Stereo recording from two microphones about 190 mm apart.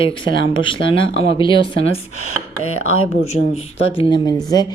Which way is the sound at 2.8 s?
90° left.